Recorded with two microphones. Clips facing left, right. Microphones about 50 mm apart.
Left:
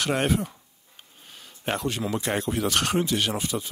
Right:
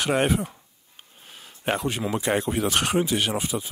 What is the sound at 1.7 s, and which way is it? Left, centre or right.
Speech, centre.